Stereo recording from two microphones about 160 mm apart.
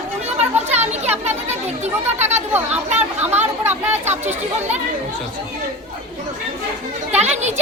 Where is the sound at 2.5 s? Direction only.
10° right (ahead or behind).